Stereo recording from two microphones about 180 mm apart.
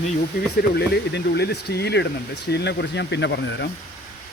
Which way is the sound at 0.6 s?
65° left (ahead or behind).